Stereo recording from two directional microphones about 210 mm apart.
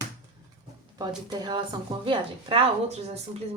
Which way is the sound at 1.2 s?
20° right (ahead or behind).